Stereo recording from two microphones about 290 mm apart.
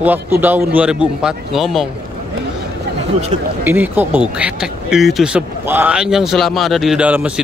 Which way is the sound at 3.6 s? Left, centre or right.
Centre.